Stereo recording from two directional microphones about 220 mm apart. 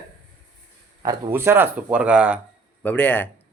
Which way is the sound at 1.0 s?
10° right (ahead or behind).